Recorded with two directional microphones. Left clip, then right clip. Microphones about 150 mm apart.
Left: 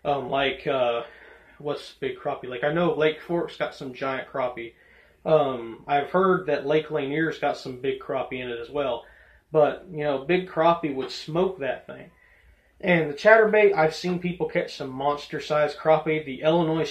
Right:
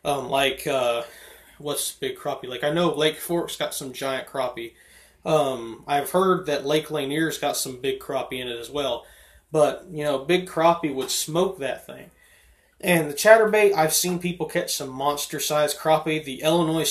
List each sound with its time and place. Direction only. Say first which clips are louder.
0.0 s speech: right 2 dB; 25° right (ahead or behind)
5.9 s speech: right 1 dB; 20° right (ahead or behind)
12.8 s speech: right 2 dB; 15° right (ahead or behind)